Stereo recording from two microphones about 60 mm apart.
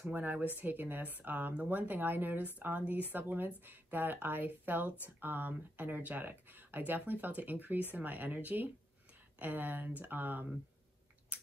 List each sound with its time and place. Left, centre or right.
0.0 s speech: right